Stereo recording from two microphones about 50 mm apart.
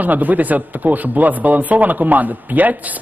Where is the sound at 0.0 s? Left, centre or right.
Right.